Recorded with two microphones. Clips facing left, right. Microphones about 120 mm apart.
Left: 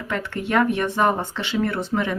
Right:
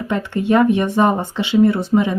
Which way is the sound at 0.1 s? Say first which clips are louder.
Right 6 dB; 20° right (ahead or behind).